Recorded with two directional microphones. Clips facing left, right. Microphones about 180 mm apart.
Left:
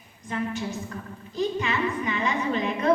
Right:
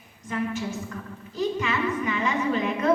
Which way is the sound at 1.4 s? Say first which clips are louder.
Even; 35° left (ahead or behind).